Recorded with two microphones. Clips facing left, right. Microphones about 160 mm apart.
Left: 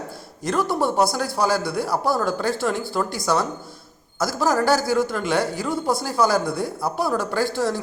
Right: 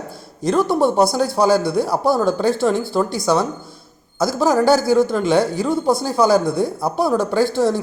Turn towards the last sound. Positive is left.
turn(degrees=-25)  # may be behind; listen again after turning